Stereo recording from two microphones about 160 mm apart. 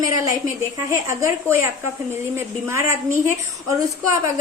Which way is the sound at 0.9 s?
20° right (ahead or behind).